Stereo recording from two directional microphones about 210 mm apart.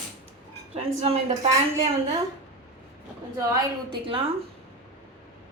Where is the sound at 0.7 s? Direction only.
30° right (ahead or behind).